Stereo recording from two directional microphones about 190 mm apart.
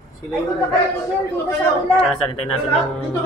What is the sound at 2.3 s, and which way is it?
Speech, 35° left (ahead or behind).